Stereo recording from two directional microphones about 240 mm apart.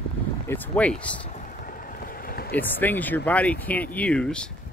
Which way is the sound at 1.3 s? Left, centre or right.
Left.